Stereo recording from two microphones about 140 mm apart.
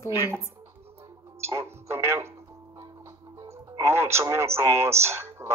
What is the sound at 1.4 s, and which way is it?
Speech, 20° right (ahead or behind).